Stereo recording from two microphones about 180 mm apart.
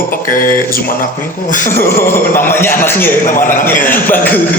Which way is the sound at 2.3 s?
10° left (ahead or behind).